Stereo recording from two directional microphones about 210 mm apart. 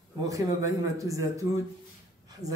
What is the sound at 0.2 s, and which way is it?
Speech, 15° right (ahead or behind).